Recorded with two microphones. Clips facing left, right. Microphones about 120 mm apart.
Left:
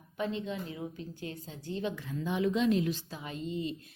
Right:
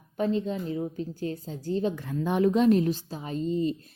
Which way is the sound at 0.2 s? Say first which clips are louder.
Right 7 dB; 40° right (ahead or behind).